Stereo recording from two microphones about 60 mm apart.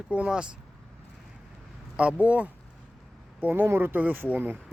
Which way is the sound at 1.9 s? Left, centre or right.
Right.